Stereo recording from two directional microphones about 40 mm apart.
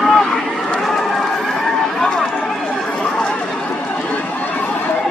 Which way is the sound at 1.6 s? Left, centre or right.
Centre.